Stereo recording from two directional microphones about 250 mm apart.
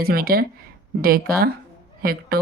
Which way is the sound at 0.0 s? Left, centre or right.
Right.